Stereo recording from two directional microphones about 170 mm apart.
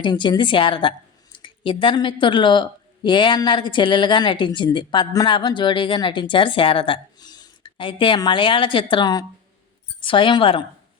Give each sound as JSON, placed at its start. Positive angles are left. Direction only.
{"t": 0.0, "sound": "a woman's voice", "side_deg": 25}